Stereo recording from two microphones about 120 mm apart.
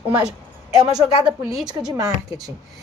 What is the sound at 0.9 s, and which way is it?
Speech, 5° right (ahead or behind).